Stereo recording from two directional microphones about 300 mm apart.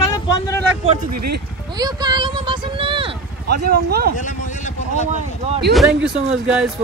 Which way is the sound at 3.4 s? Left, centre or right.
Right.